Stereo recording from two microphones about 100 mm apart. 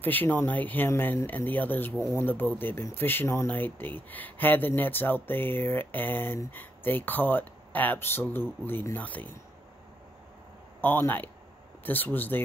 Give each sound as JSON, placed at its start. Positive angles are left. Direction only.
{"t": 0.0, "sound": "speech", "side_deg": 20}
{"t": 10.8, "sound": "speech", "side_deg": 20}